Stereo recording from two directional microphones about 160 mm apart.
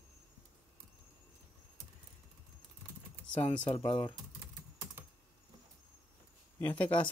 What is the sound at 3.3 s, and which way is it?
Speech, 35° left (ahead or behind).